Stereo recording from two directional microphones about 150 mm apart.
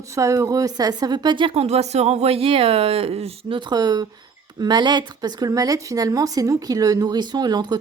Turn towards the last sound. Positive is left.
turn(degrees=-25)  # may be behind; listen again after turning